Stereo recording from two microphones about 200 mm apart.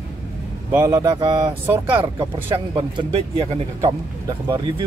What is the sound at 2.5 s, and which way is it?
Speech, 25° right (ahead or behind).